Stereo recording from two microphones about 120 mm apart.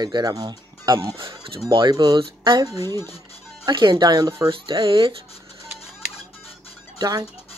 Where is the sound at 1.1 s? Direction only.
45° right (ahead or behind).